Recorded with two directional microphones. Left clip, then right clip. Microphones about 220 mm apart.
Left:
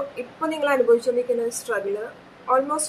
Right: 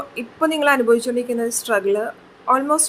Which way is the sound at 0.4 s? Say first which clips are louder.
Right 4 dB; 40° right (ahead or behind).